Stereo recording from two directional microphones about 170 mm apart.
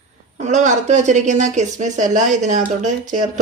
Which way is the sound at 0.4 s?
45° right (ahead or behind).